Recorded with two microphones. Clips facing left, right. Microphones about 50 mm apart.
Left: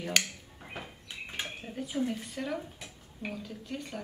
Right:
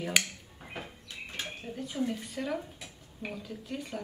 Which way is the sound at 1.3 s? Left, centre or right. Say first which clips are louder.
Even; centre.